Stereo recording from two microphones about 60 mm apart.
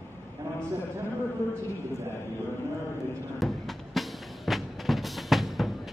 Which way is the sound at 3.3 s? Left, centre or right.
Centre.